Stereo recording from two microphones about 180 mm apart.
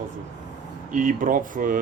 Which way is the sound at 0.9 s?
45° right (ahead or behind).